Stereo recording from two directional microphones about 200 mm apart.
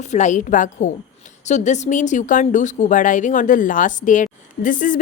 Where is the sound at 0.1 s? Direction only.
35° left (ahead or behind).